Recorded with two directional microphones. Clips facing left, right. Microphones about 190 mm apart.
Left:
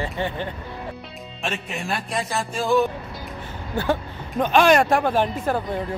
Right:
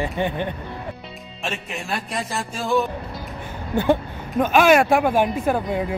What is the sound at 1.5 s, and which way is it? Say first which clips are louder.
Speech: even; centre (ahead or behind).